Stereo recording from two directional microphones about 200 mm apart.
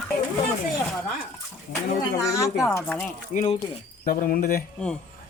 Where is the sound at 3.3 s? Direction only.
35° left (ahead or behind).